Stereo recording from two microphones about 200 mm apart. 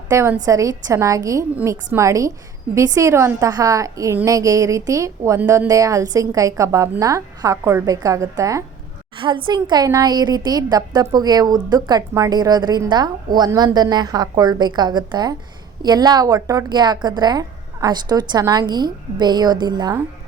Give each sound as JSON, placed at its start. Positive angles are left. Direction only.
{"t": 0.1, "sound": "a woman's voice", "side_deg": -15}